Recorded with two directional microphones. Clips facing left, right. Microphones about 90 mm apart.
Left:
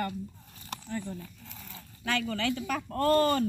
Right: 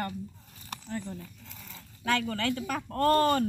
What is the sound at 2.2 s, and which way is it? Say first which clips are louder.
Speech: even; 40° right (ahead or behind).